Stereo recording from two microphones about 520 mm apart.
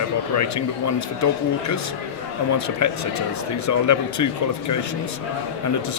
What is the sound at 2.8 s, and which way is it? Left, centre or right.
A man's voice, left.